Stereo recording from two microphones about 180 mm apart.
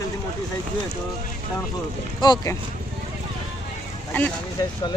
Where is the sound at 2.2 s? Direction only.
20° left (ahead or behind).